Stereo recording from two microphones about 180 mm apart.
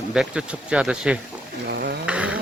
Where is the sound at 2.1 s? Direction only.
5° right (ahead or behind).